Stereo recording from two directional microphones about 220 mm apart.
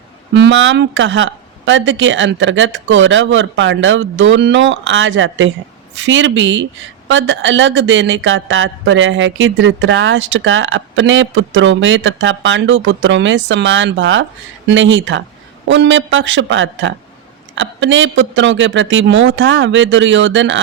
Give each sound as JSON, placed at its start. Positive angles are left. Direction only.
{"t": 0.3, "sound": "speech", "side_deg": -55}